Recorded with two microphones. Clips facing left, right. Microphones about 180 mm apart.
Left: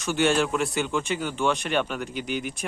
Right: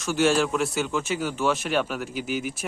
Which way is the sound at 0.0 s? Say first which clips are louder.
Right 1 dB; centre (ahead or behind).